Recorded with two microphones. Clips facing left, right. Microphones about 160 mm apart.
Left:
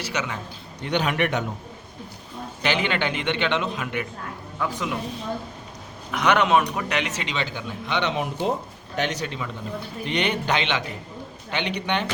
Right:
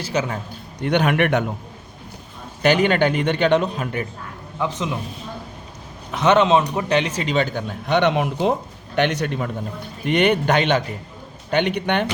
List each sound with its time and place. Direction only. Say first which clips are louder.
0.1 s a man's voice: right 8 dB; 35° right (ahead or behind)
0.9 s a man's voice: right 5 dB; 60° right (ahead or behind)
2.6 s a man's voice: right 8 dB; 45° right (ahead or behind)
4.6 s a man's voice: right 3 dB; 20° right (ahead or behind)
6.1 s a man's voice: right 4 dB; 25° right (ahead or behind); by 8.5 s 70° right (ahead or behind)
9.0 s a man's voice: right 6 dB; 55° right (ahead or behind)